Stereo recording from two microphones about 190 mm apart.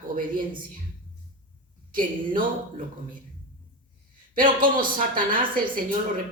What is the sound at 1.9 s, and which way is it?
Speech, 45° right (ahead or behind).